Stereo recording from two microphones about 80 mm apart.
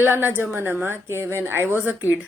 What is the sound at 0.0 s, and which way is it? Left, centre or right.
A man's voice, right.